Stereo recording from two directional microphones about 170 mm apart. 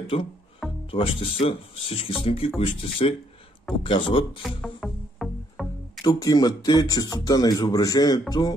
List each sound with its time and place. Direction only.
0.1 s speech: 30° left (ahead or behind)
0.6 s music: centre (ahead or behind)
0.9 s speech: 35° left (ahead or behind)
4.4 s music: 5° left (ahead or behind)
6.0 s speech: 20° left (ahead or behind)